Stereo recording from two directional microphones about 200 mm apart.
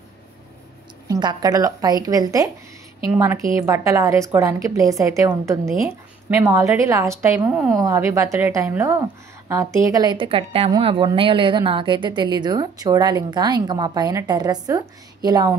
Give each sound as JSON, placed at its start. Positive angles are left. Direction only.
{"t": 1.0, "sound": "a woman's voice", "side_deg": -20}